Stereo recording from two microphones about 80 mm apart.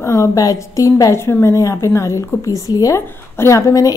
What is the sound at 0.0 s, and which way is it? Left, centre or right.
A woman's voice, left.